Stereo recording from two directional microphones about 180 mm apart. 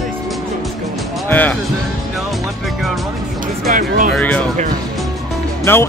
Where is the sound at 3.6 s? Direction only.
50° right (ahead or behind).